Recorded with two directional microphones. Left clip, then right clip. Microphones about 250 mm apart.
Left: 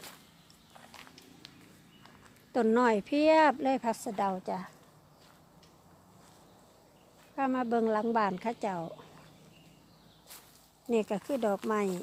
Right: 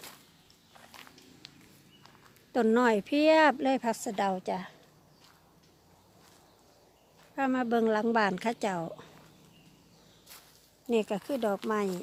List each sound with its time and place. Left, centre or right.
0.9 s walk: centre
1.4 s a sound: centre
2.0 s speech: centre
7.3 s a woman's voice: centre
10.8 s speech: centre